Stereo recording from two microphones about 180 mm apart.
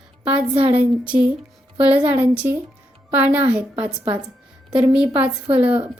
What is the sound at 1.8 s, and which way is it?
A woman's voice, 10° right (ahead or behind).